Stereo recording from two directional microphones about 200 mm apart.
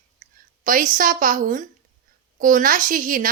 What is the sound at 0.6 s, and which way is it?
A woman's voice, 40° right (ahead or behind).